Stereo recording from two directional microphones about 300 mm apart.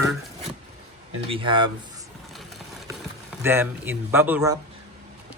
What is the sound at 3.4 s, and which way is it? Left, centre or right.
Speech, centre.